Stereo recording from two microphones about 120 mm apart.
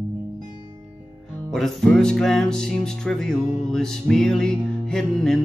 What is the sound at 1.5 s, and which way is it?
Music, 5° left (ahead or behind).